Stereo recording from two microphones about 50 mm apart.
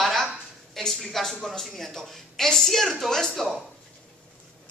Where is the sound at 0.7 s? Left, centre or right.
Centre.